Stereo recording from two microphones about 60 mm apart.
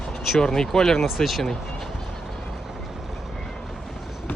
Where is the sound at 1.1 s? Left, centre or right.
Centre.